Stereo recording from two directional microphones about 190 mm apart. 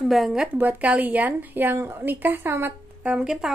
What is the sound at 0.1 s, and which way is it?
A woman's voice, centre (ahead or behind).